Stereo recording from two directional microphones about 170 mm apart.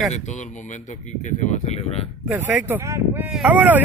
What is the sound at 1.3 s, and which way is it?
Speech, 45° left (ahead or behind).